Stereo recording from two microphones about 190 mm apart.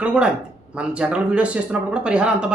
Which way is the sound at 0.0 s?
5° right (ahead or behind).